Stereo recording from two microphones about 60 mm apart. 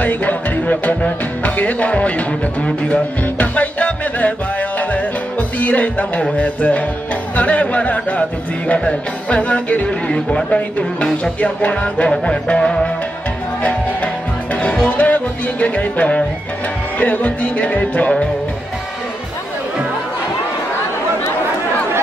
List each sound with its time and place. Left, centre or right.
0.0 s music: left